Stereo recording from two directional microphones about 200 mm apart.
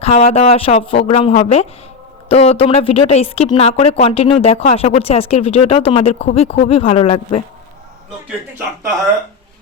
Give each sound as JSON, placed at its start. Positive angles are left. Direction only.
{"t": 0.0, "sound": "speech", "side_deg": 30}